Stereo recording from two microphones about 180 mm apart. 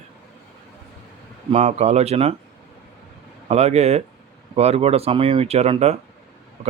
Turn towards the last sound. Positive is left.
turn(degrees=-35)  # may be behind; listen again after turning